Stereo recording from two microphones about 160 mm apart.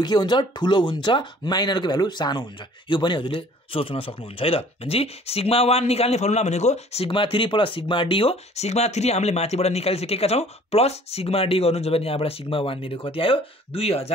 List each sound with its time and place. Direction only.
0.0 s speech: 25° left (ahead or behind)